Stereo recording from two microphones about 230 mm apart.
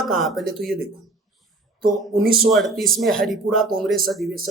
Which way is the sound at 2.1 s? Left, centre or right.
Right.